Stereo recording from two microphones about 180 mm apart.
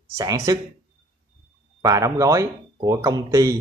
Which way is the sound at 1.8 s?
20° right (ahead or behind).